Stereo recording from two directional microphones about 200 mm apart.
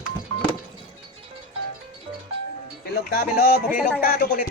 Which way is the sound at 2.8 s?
50° left (ahead or behind).